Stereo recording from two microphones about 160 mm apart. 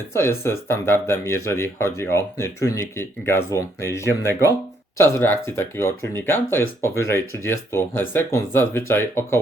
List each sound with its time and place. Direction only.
0.1 s speech: 15° left (ahead or behind)